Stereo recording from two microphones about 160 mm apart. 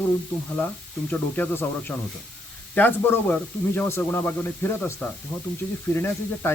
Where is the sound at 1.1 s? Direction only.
10° left (ahead or behind).